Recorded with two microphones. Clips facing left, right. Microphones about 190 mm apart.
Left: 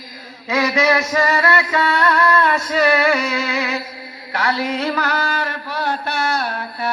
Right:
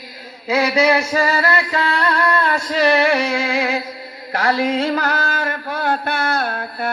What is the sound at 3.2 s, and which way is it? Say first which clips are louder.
Music: right 2 dB; 30° right (ahead or behind).